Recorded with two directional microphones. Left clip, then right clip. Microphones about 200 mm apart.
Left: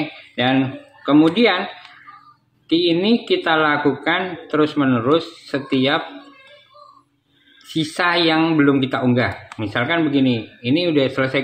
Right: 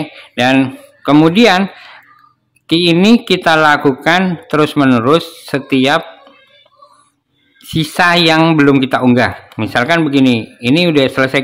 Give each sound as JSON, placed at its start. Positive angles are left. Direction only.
{"t": 0.4, "sound": "speech", "side_deg": -40}
{"t": 2.7, "sound": "a man's voice", "side_deg": -40}
{"t": 7.6, "sound": "a man's voice", "side_deg": -40}